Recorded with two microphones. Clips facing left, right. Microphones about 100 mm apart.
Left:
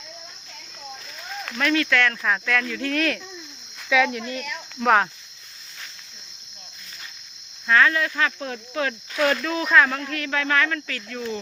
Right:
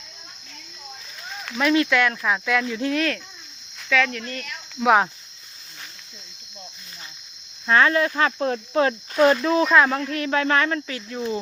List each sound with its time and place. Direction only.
1.5 s speech: 20° right (ahead or behind)
2.9 s speech: centre (ahead or behind)
3.8 s speech: 10° left (ahead or behind)
4.8 s speech: 10° right (ahead or behind)
7.7 s speech: 30° right (ahead or behind)